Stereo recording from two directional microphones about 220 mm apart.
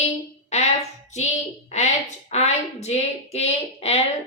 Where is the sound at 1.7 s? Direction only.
30° left (ahead or behind).